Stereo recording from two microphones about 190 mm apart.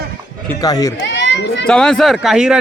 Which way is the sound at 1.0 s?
75° left (ahead or behind).